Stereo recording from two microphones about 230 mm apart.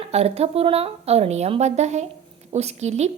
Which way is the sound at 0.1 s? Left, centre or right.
Right.